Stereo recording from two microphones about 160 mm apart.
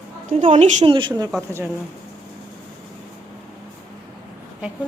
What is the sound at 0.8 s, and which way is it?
Speech, 30° right (ahead or behind).